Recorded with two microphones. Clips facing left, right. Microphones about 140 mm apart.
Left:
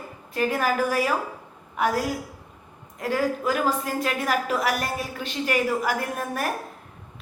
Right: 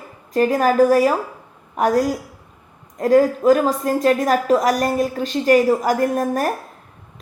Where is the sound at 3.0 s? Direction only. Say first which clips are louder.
Right 10 dB; 40° right (ahead or behind).